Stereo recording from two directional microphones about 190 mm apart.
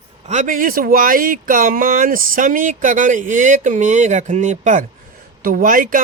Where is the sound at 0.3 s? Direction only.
40° right (ahead or behind).